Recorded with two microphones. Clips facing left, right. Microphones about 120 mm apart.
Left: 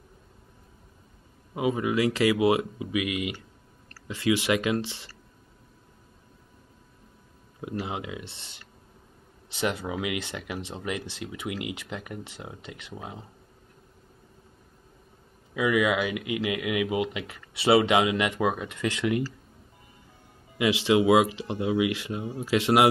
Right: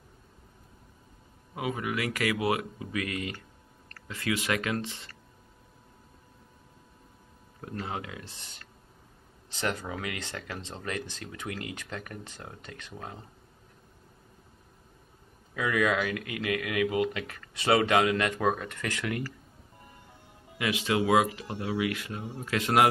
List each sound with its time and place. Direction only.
1.5 s speech: 20° left (ahead or behind)
7.6 s speech: 15° left (ahead or behind)
9.6 s speech: 15° left (ahead or behind)
15.5 s speech: 15° left (ahead or behind)
20.5 s speech: 20° left (ahead or behind)
22.2 s speech: 5° left (ahead or behind)
22.5 s speech: 20° left (ahead or behind)